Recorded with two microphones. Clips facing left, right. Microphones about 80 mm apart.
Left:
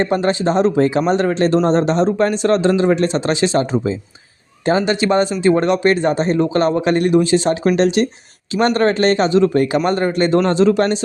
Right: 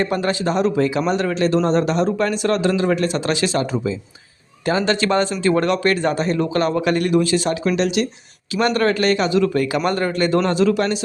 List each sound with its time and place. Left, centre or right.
0.0 s a man's voice: left
4.9 s a man's voice: centre